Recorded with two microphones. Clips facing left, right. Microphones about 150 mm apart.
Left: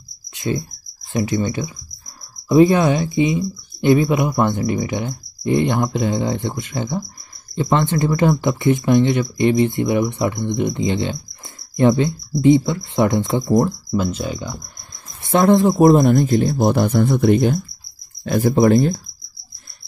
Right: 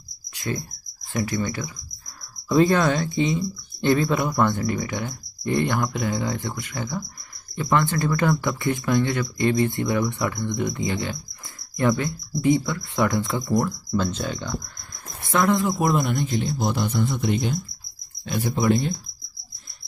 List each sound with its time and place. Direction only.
0.3 s cricket: 20° left (ahead or behind)
1.1 s speech: 20° left (ahead or behind)
13.9 s speech: 5° left (ahead or behind)
15.2 s speech: 30° left (ahead or behind); by 18.9 s 50° left (ahead or behind)